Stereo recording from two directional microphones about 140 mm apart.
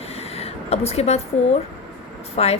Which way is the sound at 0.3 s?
50° left (ahead or behind).